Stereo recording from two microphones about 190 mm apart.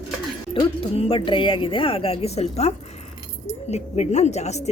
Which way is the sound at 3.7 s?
35° left (ahead or behind).